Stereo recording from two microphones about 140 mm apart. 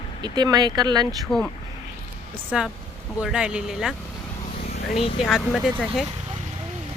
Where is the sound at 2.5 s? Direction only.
5° right (ahead or behind).